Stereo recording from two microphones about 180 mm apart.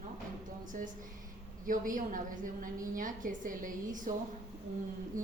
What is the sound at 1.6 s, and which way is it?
A woman's voice, 50° right (ahead or behind).